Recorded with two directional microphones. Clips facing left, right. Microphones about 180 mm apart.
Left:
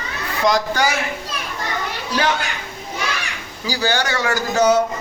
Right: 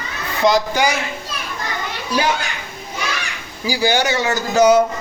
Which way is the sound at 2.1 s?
10° right (ahead or behind).